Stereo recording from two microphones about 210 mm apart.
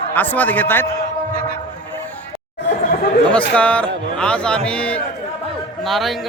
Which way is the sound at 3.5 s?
5° left (ahead or behind).